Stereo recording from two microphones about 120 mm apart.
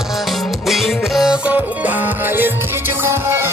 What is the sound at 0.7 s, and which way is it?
Music, centre (ahead or behind).